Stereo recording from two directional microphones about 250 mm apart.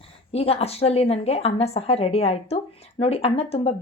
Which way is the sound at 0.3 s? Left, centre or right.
Left.